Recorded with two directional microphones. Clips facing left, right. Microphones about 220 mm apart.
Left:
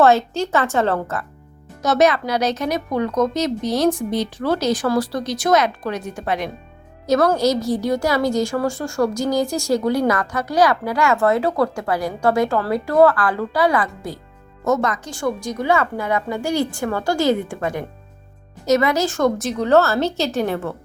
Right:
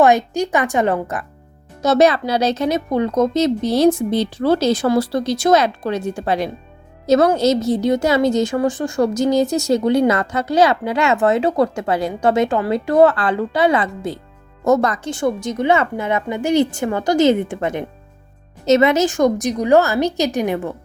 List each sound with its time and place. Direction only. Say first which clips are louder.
0.0 s a woman's voice: right 1 dB; 15° right (ahead or behind)
1.8 s a woman's voice: right 3 dB; 30° right (ahead or behind)
14.6 s a woman's voice: right 4 dB; 35° right (ahead or behind); by 20.7 s 15° right (ahead or behind)